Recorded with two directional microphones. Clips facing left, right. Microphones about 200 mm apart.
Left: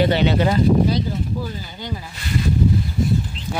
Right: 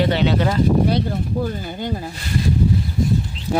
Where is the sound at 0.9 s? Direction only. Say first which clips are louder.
Right 2 dB; 60° right (ahead or behind).